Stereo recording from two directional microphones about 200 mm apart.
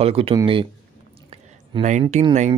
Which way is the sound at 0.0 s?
30° right (ahead or behind).